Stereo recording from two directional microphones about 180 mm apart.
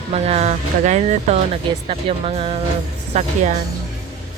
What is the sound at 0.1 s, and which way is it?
Speech, 35° right (ahead or behind).